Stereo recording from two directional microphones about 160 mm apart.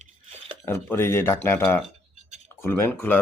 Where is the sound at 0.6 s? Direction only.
15° left (ahead or behind).